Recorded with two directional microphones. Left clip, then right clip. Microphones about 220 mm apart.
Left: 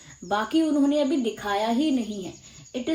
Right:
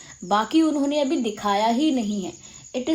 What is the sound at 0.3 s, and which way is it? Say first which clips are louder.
Speech: right 4 dB; 35° right (ahead or behind).